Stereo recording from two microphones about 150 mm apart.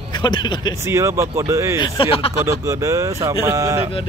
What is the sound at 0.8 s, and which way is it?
Speech, 20° right (ahead or behind).